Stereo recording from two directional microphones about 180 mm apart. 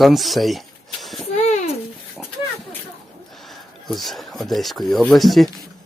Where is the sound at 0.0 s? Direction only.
Centre (ahead or behind).